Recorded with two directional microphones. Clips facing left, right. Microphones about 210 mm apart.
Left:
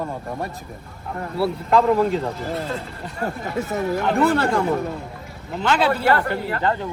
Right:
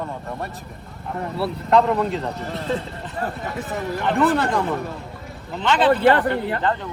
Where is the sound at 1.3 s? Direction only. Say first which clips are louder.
Even; centre (ahead or behind).